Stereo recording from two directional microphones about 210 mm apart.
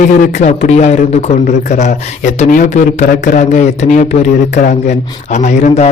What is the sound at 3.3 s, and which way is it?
Speech, 40° left (ahead or behind).